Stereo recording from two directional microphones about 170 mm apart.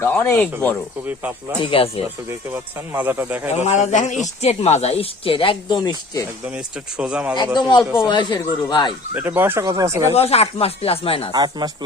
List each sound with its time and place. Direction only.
0.0 s speech: 15° left (ahead or behind)
1.0 s speech: 10° right (ahead or behind)
1.6 s speech: 30° left (ahead or behind)
2.5 s speech: 10° right (ahead or behind)
3.5 s a man's voice: 40° left (ahead or behind); by 6.2 s 25° left (ahead or behind)
6.9 s speech: 5° right (ahead or behind)
7.5 s speech: 25° left (ahead or behind)
9.1 s speech: 15° right (ahead or behind)
10.1 s speech: 35° left (ahead or behind)
11.3 s speech: 25° right (ahead or behind)